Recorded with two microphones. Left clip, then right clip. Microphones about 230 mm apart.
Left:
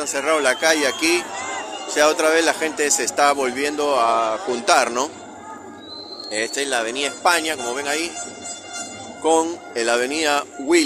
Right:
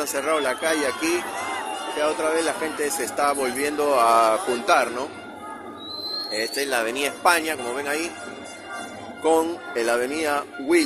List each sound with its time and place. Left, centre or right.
0.0 s speech: centre
4.6 s speech: centre
6.3 s speech: centre
9.2 s speech: centre